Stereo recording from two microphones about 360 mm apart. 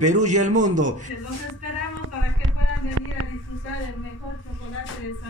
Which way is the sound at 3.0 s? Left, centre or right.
Right.